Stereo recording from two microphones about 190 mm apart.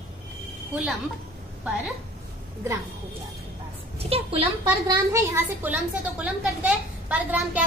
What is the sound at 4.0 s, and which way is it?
Speech, 30° right (ahead or behind).